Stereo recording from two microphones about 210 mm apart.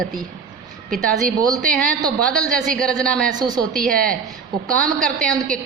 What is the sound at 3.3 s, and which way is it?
Speech, 20° right (ahead or behind).